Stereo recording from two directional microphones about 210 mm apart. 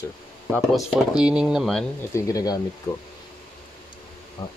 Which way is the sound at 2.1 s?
15° left (ahead or behind).